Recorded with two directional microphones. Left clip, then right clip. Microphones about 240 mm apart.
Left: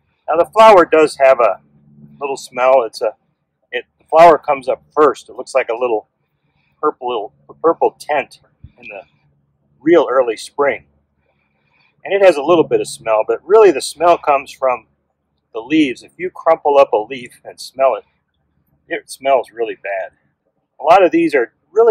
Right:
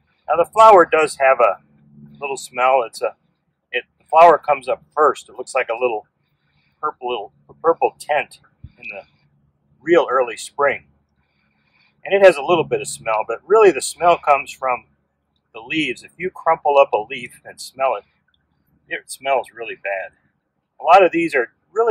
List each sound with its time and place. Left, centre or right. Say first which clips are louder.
0.2 s speech: left 3 dB; left
9.0 s a sound: left 3 dB; centre
9.8 s speech: left 4 dB; left
12.2 s speech: left 2 dB; centre